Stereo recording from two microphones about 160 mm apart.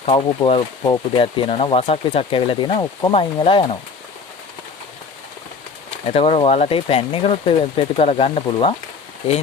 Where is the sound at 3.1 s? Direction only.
35° left (ahead or behind).